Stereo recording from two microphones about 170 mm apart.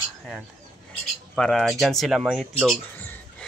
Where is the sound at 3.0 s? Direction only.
10° left (ahead or behind).